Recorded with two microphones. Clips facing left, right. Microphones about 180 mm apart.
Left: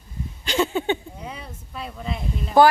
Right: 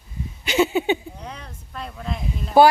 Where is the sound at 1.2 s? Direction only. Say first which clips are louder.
Left 1 dB; 5° left (ahead or behind).